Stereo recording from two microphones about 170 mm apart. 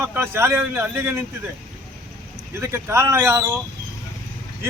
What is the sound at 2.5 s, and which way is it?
Speech, 15° right (ahead or behind).